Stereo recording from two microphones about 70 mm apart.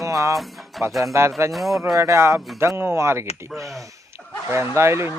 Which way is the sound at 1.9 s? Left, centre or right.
Right.